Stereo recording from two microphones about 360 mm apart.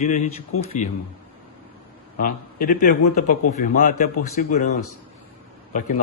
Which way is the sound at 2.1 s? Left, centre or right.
Left.